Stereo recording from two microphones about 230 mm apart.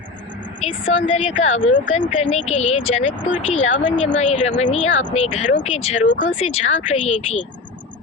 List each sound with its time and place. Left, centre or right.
0.6 s speech: left